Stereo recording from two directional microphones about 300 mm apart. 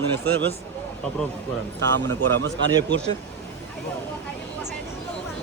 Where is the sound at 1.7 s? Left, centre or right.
Right.